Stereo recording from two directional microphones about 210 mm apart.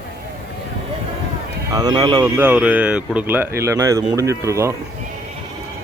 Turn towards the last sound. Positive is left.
turn(degrees=-15)  # may be behind; listen again after turning